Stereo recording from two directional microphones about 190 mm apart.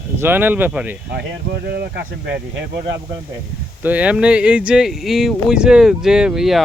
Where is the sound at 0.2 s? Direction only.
10° right (ahead or behind).